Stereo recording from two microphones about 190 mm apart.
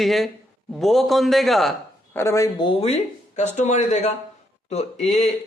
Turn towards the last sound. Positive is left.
turn(degrees=35)  # may be behind; listen again after turning